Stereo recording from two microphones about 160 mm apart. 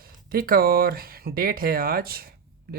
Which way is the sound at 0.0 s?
65° right (ahead or behind).